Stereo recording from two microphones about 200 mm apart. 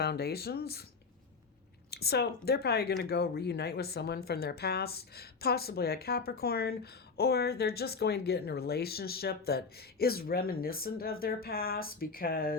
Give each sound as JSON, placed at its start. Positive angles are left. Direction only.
{"t": 0.0, "sound": "speech", "side_deg": 55}
{"t": 1.9, "sound": "speech", "side_deg": 50}